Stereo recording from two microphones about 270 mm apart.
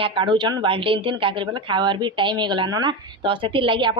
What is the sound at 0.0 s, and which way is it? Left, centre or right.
A woman's voice, centre.